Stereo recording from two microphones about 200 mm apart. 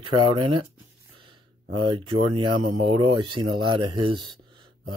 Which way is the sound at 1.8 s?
25° right (ahead or behind).